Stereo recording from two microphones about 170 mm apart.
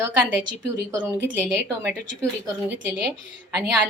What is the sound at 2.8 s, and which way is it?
Speech, 10° right (ahead or behind).